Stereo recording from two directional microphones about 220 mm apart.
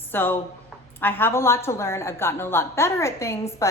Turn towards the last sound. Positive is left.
turn(degrees=15)  # may be behind; listen again after turning